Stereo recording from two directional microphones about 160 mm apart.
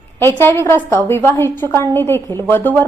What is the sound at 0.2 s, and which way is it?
A woman's voice, 15° left (ahead or behind).